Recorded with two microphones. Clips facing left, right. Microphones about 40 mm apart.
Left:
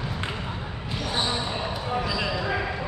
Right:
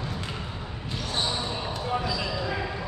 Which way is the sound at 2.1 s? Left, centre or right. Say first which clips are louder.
Left 3 dB; left.